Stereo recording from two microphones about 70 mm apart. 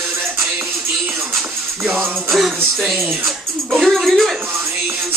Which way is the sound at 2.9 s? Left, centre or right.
Centre.